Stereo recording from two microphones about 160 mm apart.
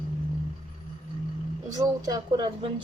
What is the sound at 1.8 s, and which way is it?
A woman's voice, 20° right (ahead or behind).